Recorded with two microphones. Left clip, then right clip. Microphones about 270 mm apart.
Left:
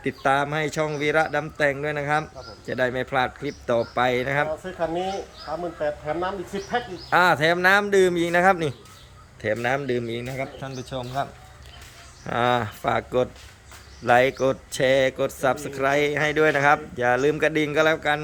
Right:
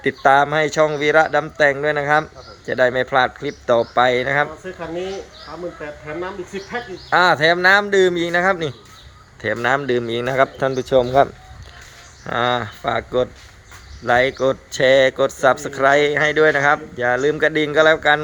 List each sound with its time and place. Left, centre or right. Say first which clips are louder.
0.0 s speech: right 8 dB; centre
4.6 s speech: left 1 dB; left
7.1 s speech: right 4 dB; centre
10.3 s speech: right 15 dB; right
12.2 s speech: right 3 dB; centre